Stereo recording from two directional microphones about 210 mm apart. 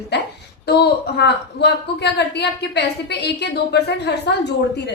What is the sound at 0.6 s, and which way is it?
A woman's voice, 50° left (ahead or behind).